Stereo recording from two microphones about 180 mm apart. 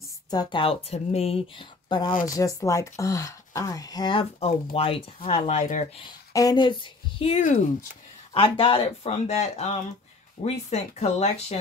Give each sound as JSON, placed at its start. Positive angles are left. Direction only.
{"t": 0.3, "sound": "speech", "side_deg": 25}
{"t": 6.0, "sound": "speech", "side_deg": 20}